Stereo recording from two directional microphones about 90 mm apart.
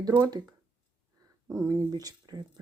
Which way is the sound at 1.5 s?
35° right (ahead or behind).